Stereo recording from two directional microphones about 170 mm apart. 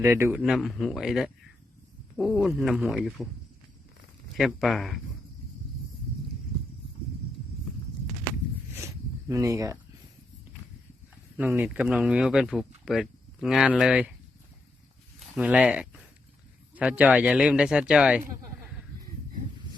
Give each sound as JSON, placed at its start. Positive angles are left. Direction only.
{"t": 0.0, "sound": "speech", "side_deg": -15}
{"t": 0.4, "sound": "speech", "side_deg": 0}
{"t": 4.4, "sound": "speech", "side_deg": 0}
{"t": 9.3, "sound": "speech", "side_deg": -20}
{"t": 11.3, "sound": "speech", "side_deg": -10}
{"t": 15.4, "sound": "speech", "side_deg": -10}